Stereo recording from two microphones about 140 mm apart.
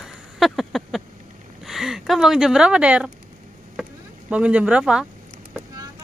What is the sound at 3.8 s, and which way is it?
Insect, 10° right (ahead or behind).